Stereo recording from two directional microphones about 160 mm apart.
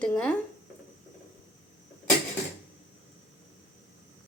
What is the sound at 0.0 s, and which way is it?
Speech, 5° left (ahead or behind).